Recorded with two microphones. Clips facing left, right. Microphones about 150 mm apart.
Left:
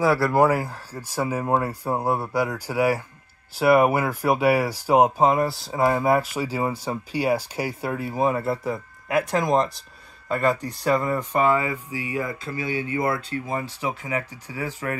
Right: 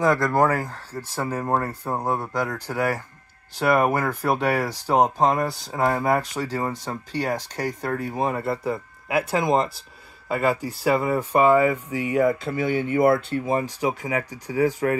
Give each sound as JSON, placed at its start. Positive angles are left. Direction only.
{"t": 0.0, "sound": "speech", "side_deg": 5}
{"t": 12.1, "sound": "speech", "side_deg": -60}
{"t": 13.5, "sound": "speech", "side_deg": -20}